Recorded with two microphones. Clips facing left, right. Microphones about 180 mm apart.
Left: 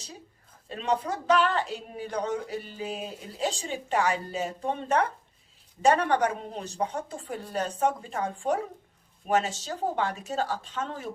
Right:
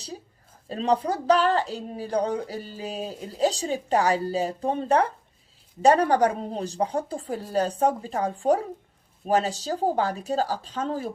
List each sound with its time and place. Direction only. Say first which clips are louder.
0.7 s a woman's voice: right 5 dB; 35° right (ahead or behind)